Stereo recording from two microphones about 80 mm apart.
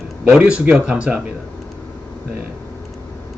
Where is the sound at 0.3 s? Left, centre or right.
Centre.